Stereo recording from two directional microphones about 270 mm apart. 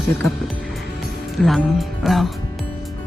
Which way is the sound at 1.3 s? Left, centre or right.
Centre.